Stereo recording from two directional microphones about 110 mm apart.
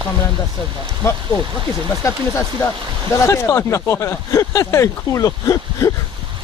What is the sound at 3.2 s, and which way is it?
Speech, 25° left (ahead or behind).